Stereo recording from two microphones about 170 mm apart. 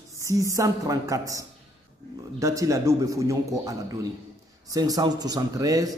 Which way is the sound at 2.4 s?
20° right (ahead or behind).